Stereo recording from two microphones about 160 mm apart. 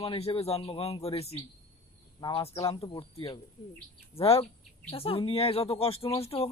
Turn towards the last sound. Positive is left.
turn(degrees=40)  # may be behind; listen again after turning